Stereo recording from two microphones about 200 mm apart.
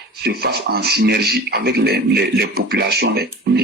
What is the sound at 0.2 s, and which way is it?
A man's voice, 50° right (ahead or behind).